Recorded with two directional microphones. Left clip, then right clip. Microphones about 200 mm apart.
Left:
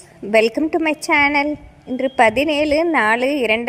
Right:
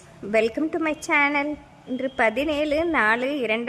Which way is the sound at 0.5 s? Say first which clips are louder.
Left 6 dB; 20° left (ahead or behind).